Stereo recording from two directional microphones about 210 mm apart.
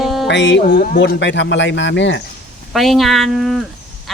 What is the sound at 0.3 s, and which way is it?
A man's voice, 60° left (ahead or behind).